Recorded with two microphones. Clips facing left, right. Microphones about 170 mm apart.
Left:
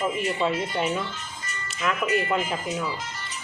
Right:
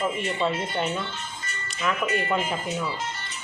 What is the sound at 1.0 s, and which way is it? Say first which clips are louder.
Music: right 1 dB; 25° right (ahead or behind).